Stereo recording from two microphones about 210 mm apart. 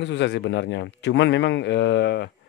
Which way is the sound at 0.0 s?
55° left (ahead or behind).